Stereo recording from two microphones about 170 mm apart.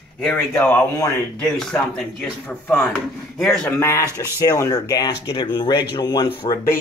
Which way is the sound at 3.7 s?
15° left (ahead or behind).